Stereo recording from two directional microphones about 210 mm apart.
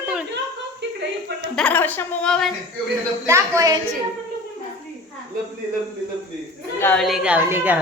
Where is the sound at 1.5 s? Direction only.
5° left (ahead or behind).